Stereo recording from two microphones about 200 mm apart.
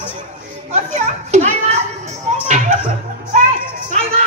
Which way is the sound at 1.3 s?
35° right (ahead or behind).